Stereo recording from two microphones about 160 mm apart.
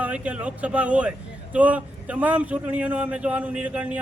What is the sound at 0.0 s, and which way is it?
A man's voice, 10° right (ahead or behind).